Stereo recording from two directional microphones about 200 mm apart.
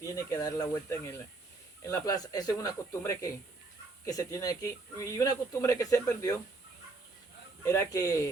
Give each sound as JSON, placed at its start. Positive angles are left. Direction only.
{"t": 0.0, "sound": "speech", "side_deg": 15}
{"t": 7.7, "sound": "speech", "side_deg": 15}